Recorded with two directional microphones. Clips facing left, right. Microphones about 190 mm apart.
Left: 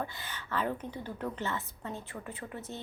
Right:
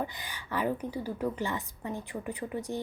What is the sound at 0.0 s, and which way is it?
A woman's voice, 15° right (ahead or behind).